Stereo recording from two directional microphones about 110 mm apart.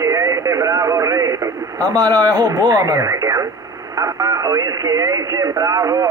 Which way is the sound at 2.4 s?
35° right (ahead or behind).